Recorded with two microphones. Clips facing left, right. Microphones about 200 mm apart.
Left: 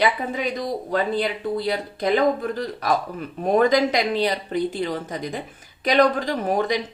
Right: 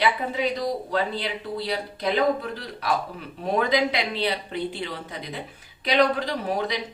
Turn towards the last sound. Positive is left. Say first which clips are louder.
# left 4 dB
turn(degrees=45)  # may be behind; listen again after turning